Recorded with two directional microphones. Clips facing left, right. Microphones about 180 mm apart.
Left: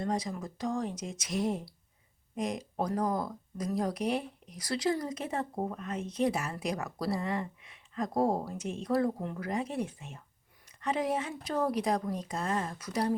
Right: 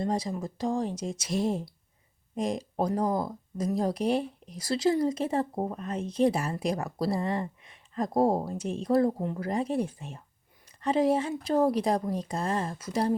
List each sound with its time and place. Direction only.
0.0 s speech: 30° right (ahead or behind)